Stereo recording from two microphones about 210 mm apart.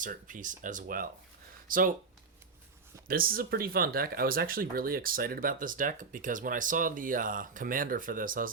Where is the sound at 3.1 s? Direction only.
45° right (ahead or behind).